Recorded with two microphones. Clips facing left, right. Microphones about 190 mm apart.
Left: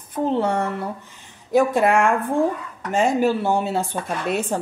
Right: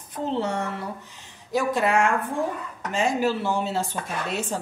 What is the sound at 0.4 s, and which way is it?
A woman's voice, 55° left (ahead or behind).